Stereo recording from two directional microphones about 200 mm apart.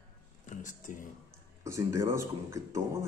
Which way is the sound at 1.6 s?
15° right (ahead or behind).